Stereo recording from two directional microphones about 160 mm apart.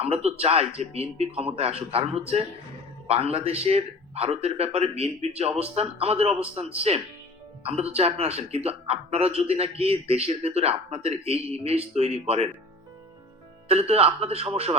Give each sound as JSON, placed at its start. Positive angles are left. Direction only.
{"t": 0.0, "sound": "speech", "side_deg": -40}
{"t": 13.7, "sound": "speech", "side_deg": -40}